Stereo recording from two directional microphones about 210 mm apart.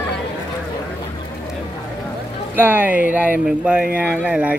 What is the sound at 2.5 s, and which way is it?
Speech, 10° right (ahead or behind).